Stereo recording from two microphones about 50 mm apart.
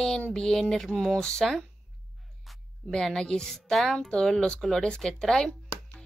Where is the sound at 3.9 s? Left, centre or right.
Centre.